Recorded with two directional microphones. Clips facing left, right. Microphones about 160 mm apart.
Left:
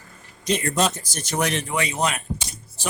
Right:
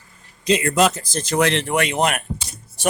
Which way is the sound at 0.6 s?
90° right.